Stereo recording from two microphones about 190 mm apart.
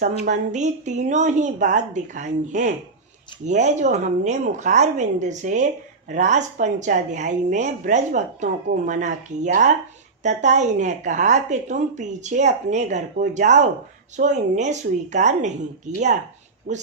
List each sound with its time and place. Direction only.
0.3 s a woman's voice: 40° right (ahead or behind)